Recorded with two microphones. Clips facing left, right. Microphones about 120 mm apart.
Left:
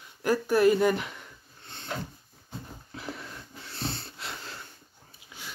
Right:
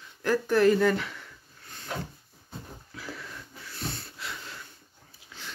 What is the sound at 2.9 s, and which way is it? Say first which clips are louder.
Wheeze: left 2 dB; 25° left (ahead or behind).